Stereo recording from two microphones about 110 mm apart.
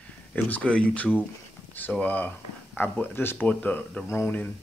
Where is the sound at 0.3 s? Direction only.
10° left (ahead or behind).